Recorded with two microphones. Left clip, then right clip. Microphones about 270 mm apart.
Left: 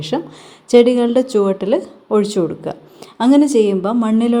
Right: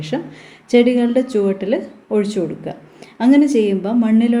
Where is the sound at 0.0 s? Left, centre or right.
Left.